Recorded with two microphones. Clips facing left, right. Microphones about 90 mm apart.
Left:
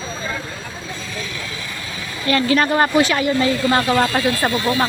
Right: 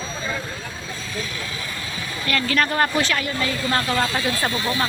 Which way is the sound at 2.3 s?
20° left (ahead or behind).